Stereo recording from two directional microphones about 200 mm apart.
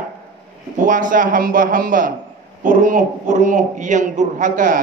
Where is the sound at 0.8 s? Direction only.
40° right (ahead or behind).